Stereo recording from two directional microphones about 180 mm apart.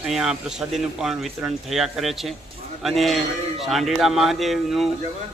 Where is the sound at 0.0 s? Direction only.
Centre (ahead or behind).